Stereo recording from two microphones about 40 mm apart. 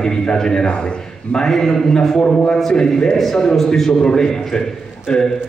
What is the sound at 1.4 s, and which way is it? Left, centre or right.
A man's voice, centre.